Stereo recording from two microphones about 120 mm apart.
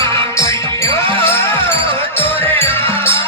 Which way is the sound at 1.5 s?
50° right (ahead or behind).